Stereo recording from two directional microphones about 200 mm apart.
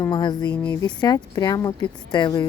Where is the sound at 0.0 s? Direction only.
20° left (ahead or behind).